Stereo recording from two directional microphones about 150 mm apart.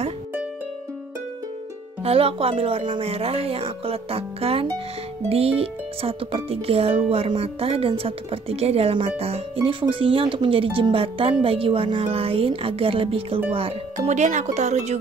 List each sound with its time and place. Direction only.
2.0 s speech: 40° right (ahead or behind)
13.9 s speech: 55° right (ahead or behind)